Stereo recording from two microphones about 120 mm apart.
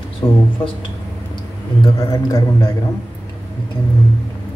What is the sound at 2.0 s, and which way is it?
Speech, 25° left (ahead or behind).